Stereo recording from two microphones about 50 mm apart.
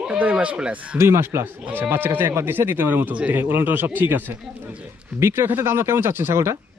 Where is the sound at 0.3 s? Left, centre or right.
Centre.